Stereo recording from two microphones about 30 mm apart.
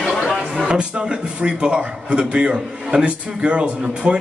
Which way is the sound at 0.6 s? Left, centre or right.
Right.